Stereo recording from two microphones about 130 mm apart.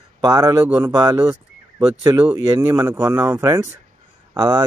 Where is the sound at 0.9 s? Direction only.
30° right (ahead or behind).